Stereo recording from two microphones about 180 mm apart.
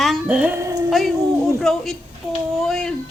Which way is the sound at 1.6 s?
Centre (ahead or behind).